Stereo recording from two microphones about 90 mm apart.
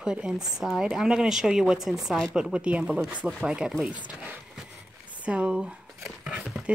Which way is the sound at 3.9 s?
10° right (ahead or behind).